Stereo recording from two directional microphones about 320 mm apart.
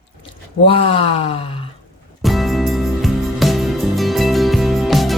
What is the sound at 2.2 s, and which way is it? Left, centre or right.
Music, centre.